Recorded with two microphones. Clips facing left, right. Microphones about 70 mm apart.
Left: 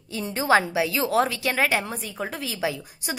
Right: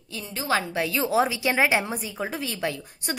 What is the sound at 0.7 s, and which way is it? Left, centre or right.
A woman's voice, centre.